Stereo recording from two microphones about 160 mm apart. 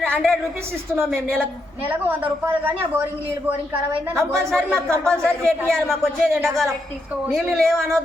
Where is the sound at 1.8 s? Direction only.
10° right (ahead or behind).